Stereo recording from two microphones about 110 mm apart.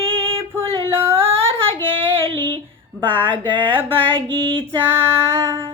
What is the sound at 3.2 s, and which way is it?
Music, 50° right (ahead or behind).